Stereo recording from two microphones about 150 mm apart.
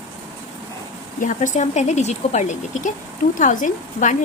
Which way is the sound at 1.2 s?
55° left (ahead or behind).